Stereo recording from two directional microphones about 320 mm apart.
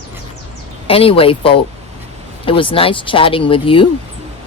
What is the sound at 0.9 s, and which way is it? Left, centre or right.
Speech, centre.